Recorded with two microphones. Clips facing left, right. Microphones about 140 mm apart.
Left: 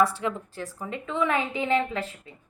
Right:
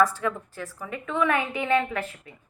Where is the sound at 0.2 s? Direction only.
20° left (ahead or behind).